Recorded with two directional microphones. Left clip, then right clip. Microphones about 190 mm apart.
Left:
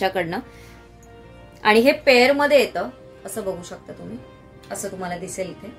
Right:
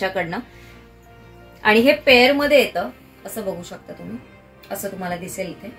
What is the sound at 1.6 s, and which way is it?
Speech, 50° left (ahead or behind).